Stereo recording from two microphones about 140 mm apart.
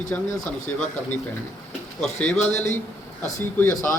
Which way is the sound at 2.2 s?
10° left (ahead or behind).